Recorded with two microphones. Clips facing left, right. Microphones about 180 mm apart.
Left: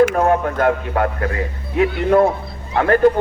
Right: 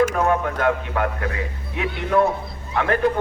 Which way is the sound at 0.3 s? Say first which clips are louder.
Left 4 dB; 40° left (ahead or behind).